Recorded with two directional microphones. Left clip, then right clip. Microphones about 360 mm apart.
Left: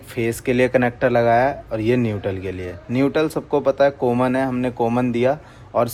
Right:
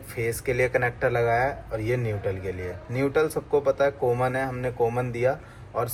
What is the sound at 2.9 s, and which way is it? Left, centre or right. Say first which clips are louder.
Speech: left 5 dB; left.